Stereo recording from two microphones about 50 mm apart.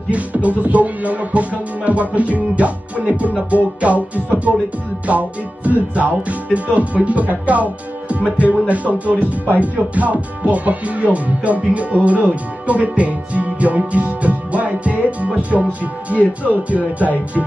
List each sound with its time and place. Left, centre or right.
0.1 s speech: right
3.2 s music: right
5.0 s speech: right
16.4 s music: right